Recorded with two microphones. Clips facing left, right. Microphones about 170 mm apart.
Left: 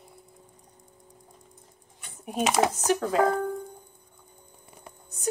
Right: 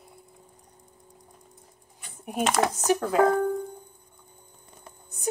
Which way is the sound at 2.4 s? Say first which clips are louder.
Left 1 dB; 10° left (ahead or behind).